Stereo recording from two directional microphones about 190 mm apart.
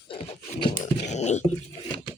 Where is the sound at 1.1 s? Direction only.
40° left (ahead or behind).